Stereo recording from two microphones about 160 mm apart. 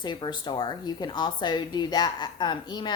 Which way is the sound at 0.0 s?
30° left (ahead or behind).